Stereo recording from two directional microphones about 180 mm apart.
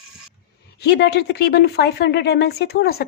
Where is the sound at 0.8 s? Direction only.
70° left (ahead or behind).